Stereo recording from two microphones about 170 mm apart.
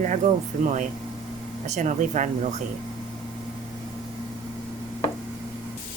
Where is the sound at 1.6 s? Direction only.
45° right (ahead or behind).